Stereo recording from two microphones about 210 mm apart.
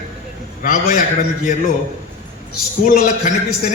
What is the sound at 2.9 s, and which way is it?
Speech, 40° left (ahead or behind).